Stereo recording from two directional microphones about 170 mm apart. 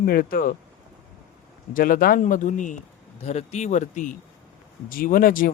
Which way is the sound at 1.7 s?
55° left (ahead or behind).